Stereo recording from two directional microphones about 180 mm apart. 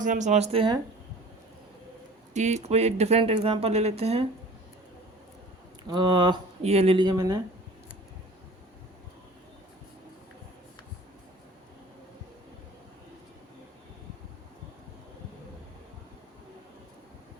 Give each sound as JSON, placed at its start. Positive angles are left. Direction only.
{"t": 0.0, "sound": "speech", "side_deg": -45}
{"t": 2.3, "sound": "speech", "side_deg": -40}
{"t": 5.9, "sound": "speech", "side_deg": -25}